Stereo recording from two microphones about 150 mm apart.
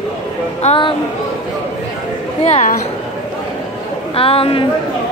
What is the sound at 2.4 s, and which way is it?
Speech, 50° left (ahead or behind).